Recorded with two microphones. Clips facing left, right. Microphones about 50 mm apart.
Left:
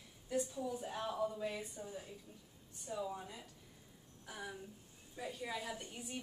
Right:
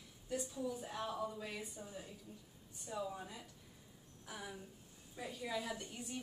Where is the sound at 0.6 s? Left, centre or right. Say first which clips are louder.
Left 1 dB; centre.